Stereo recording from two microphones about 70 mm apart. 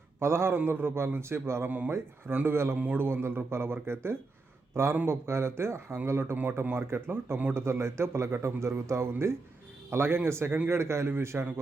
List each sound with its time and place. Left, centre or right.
0.2 s a man's voice: right
6.3 s a man's voice: right